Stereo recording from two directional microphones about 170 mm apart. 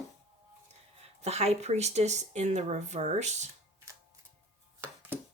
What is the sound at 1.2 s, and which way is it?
Speech, 40° right (ahead or behind).